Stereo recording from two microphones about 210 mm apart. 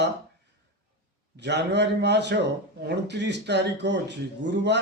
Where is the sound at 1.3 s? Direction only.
55° right (ahead or behind).